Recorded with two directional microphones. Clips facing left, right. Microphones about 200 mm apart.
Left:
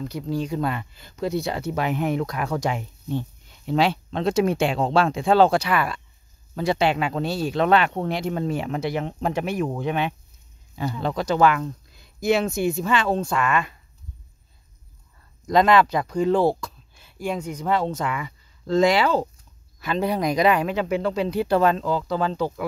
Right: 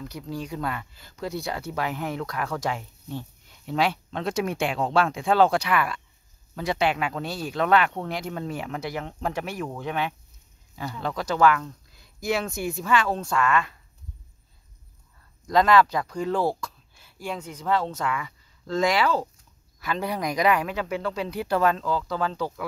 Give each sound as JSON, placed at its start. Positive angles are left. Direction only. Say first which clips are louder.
{"t": 0.0, "sound": "speech", "louder": "left 7 dB", "side_deg": 25}
{"t": 15.4, "sound": "speech", "louder": "left 2 dB", "side_deg": 20}